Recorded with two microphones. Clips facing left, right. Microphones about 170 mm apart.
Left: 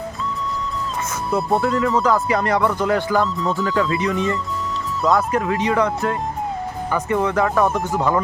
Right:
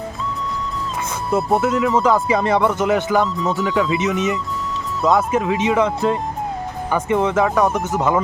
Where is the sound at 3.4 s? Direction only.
Centre (ahead or behind).